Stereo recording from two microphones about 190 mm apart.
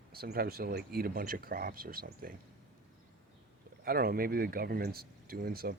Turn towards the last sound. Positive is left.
turn(degrees=-55)  # may be behind; listen again after turning